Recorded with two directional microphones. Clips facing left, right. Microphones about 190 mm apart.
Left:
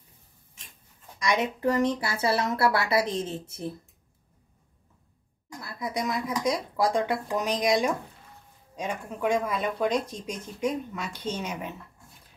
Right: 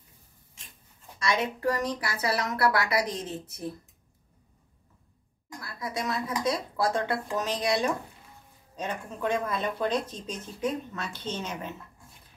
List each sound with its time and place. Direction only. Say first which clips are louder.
1.2 s speech: left 2 dB; 20° left (ahead or behind)
5.6 s speech: left 3 dB; 20° left (ahead or behind)